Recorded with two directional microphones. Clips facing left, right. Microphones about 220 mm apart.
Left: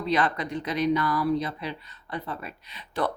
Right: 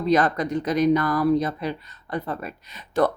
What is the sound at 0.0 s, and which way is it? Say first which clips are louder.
Speech: right 5 dB; 45° right (ahead or behind).